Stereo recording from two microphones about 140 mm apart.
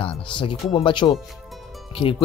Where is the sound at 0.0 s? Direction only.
35° left (ahead or behind).